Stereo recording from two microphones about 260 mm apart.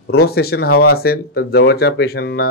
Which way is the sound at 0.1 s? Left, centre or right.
Left.